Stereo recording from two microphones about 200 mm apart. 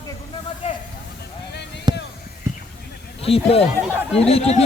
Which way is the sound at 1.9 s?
20° right (ahead or behind).